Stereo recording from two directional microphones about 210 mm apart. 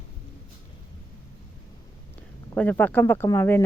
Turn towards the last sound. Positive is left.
turn(degrees=10)  # may be behind; listen again after turning